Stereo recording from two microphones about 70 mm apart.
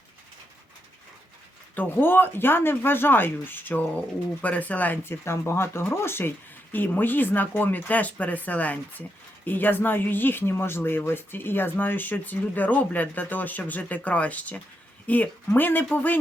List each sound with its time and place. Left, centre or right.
1.7 s speech: left
5.0 s speech: left